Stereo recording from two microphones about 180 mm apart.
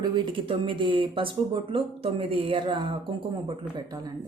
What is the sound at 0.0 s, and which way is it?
Speech, 25° right (ahead or behind).